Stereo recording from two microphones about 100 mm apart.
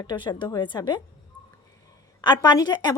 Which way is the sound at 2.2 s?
45° left (ahead or behind).